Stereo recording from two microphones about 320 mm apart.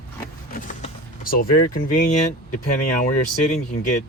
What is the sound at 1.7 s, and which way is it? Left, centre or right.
Speech, left.